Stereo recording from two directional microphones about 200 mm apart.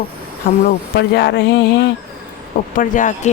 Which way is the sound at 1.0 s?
60° left (ahead or behind).